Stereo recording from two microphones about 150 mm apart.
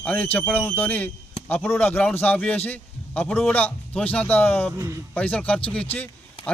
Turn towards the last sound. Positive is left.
turn(degrees=10)  # may be behind; listen again after turning